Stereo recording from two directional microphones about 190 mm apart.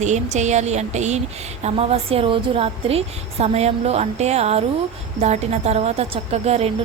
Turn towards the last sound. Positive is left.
turn(degrees=-35)  # may be behind; listen again after turning